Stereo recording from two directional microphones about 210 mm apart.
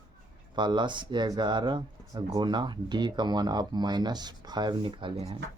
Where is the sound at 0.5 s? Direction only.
20° right (ahead or behind).